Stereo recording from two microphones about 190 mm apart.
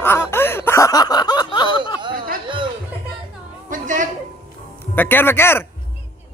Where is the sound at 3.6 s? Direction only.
40° right (ahead or behind).